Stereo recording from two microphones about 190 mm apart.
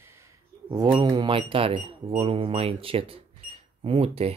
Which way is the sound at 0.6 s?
20° right (ahead or behind).